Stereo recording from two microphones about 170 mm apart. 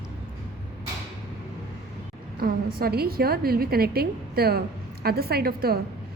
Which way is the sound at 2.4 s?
65° right (ahead or behind).